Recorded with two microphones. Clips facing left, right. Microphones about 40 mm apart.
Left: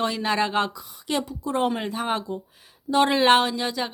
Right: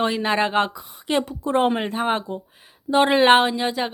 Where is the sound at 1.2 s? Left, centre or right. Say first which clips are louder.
Right 4 dB; right.